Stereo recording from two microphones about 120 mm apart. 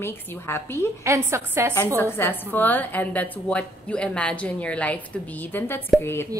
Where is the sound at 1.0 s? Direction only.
25° right (ahead or behind).